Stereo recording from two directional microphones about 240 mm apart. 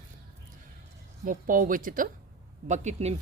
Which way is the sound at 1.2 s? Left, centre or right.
Right.